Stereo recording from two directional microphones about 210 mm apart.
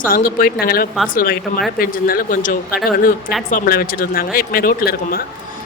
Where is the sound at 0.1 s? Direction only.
45° left (ahead or behind).